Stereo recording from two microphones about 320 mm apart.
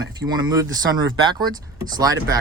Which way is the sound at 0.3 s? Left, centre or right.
Centre.